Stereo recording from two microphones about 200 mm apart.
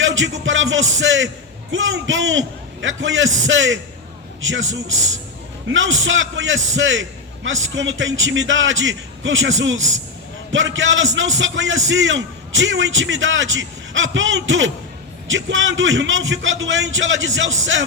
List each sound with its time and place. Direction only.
0.0 s a man's voice: 70° right (ahead or behind)